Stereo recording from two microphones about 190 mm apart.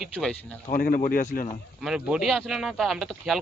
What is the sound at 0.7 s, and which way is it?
Speech, 50° left (ahead or behind).